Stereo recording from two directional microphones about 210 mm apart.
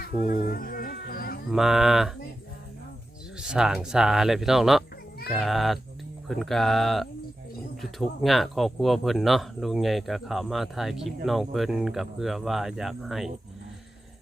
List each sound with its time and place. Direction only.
0.0 s insect: 45° left (ahead or behind)
1.5 s speech: centre (ahead or behind)
3.3 s speech: 5° right (ahead or behind)